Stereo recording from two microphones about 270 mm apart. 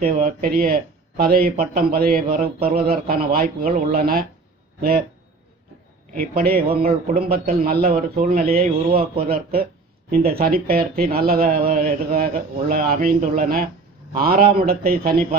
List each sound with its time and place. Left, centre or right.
0.0 s speech: right
6.1 s speech: right